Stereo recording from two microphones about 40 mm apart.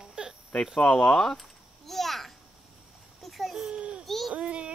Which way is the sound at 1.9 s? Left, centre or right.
Centre.